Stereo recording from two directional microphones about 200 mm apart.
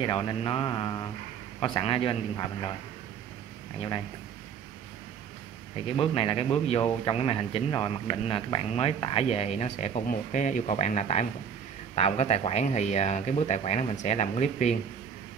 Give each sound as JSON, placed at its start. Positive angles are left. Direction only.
{"t": 0.0, "sound": "a man's voice", "side_deg": 25}
{"t": 5.9, "sound": "a man's voice", "side_deg": 25}